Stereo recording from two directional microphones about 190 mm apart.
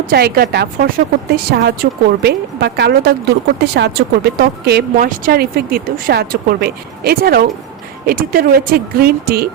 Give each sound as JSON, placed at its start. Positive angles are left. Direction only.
{"t": 0.1, "sound": "a woman's voice", "side_deg": -55}